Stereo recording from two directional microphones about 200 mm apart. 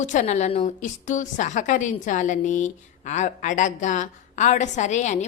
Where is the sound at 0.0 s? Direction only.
35° left (ahead or behind).